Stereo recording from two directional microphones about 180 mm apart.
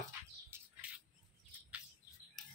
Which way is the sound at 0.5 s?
15° right (ahead or behind).